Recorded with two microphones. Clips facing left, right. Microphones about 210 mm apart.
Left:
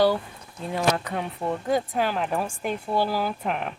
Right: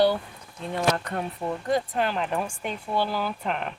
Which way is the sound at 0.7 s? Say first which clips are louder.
Left 1 dB; 5° left (ahead or behind).